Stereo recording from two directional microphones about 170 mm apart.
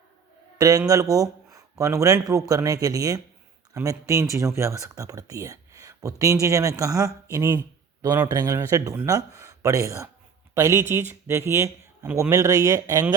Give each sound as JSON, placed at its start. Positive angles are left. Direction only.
{"t": 0.6, "sound": "speech", "side_deg": -20}